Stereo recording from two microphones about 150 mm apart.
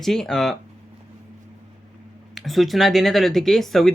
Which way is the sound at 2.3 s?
Centre (ahead or behind).